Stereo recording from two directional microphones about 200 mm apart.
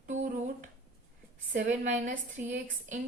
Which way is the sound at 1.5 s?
40° right (ahead or behind).